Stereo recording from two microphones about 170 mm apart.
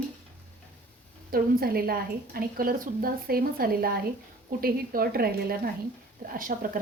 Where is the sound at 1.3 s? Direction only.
60° right (ahead or behind).